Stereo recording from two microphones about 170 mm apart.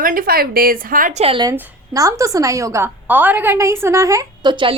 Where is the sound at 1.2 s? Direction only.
30° right (ahead or behind).